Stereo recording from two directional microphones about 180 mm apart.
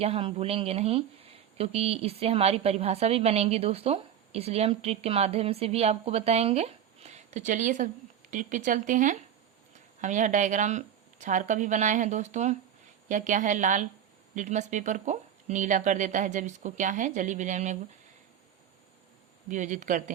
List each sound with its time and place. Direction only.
0.0 s speech: 30° right (ahead or behind)
19.5 s speech: 45° right (ahead or behind)